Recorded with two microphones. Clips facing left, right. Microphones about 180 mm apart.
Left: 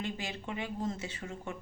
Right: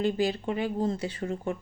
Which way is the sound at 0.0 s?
35° right (ahead or behind).